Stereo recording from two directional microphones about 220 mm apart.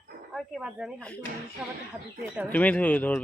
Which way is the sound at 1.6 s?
5° right (ahead or behind).